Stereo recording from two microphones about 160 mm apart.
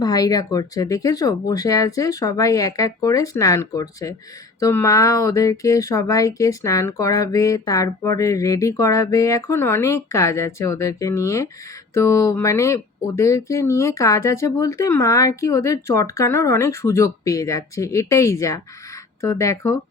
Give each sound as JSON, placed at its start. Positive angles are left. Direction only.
{"t": 0.0, "sound": "speech", "side_deg": 25}